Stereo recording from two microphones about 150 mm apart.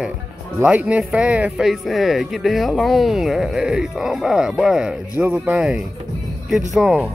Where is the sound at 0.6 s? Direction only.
10° right (ahead or behind).